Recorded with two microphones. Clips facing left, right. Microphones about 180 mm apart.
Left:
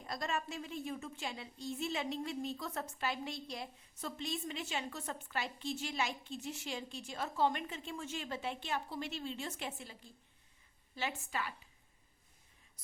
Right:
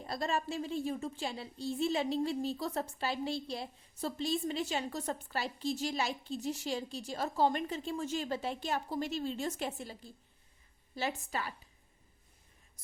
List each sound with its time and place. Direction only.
0.0 s a woman's voice: 30° right (ahead or behind)